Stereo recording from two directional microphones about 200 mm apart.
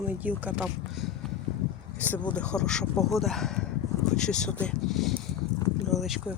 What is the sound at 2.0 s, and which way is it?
Speech, 10° left (ahead or behind).